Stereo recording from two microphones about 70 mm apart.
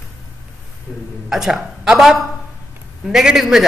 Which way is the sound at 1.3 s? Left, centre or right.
Centre.